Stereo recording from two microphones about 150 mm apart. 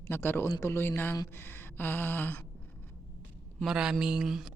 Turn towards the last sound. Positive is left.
turn(degrees=0)  # may be behind; listen again after turning